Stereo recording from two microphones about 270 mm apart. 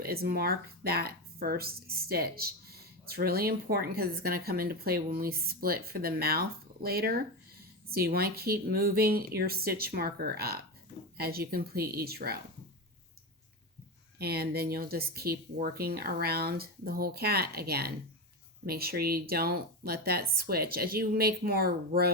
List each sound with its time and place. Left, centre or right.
0.0 s speech: right
14.2 s speech: right